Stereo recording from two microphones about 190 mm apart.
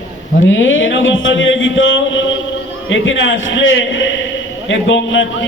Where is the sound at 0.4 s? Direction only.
90° left.